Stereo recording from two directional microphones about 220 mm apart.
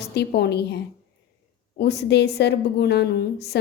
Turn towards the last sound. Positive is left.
turn(degrees=50)  # may be behind; listen again after turning